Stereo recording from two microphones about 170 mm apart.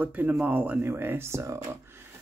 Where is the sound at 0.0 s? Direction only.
10° right (ahead or behind).